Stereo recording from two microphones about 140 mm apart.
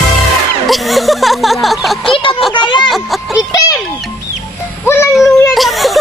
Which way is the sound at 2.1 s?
40° left (ahead or behind).